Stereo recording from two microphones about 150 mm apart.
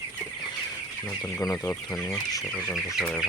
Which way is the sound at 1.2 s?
20° left (ahead or behind).